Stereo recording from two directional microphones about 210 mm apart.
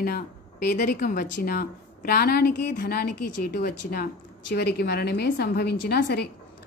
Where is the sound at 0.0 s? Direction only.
50° left (ahead or behind).